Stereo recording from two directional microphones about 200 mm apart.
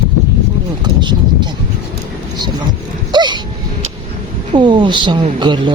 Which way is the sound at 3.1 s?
20° right (ahead or behind).